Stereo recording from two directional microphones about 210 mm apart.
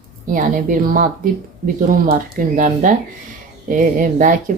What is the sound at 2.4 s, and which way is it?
Speech, 40° right (ahead or behind).